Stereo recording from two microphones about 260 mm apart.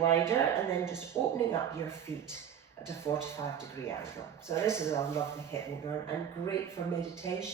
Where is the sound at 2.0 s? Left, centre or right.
Centre.